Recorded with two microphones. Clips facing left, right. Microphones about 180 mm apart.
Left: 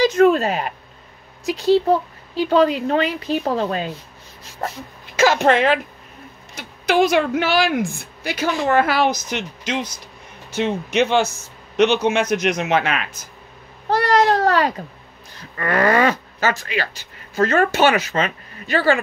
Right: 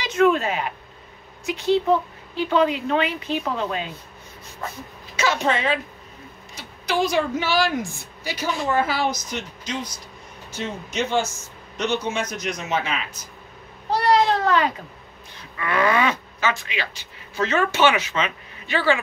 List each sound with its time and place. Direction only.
0.0 s a sound: 40° left (ahead or behind)
1.4 s speech: 35° left (ahead or behind)
5.3 s a woman's voice: 75° left (ahead or behind)
6.9 s a woman's voice: 75° left (ahead or behind)
13.8 s cat: 90° left
14.2 s a sound: 40° left (ahead or behind)
15.5 s speech: 45° left (ahead or behind)